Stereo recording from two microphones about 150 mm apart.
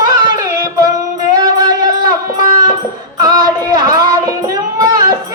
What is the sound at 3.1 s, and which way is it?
Child singing, 25° right (ahead or behind).